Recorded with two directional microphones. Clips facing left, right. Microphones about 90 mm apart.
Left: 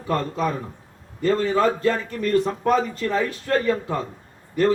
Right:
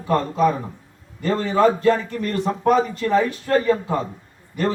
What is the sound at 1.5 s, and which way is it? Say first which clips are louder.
Speech: right 8 dB; 10° right (ahead or behind).